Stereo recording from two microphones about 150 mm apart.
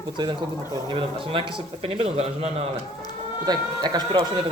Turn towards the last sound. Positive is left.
turn(degrees=-30)  # may be behind; listen again after turning